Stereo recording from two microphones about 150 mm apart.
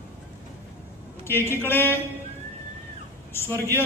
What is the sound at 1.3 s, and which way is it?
Speech, 15° left (ahead or behind).